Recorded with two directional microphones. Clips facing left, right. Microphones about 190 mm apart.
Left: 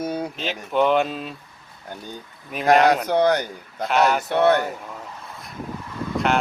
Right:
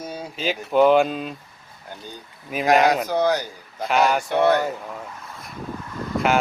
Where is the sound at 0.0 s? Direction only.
60° left (ahead or behind).